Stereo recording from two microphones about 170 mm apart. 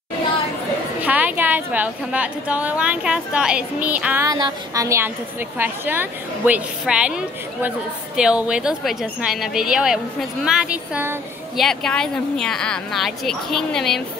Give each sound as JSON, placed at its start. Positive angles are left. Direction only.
{"t": 1.0, "sound": "a woman's voice", "side_deg": -10}
{"t": 4.3, "sound": "a woman's voice", "side_deg": -25}
{"t": 11.6, "sound": "a woman's voice", "side_deg": 5}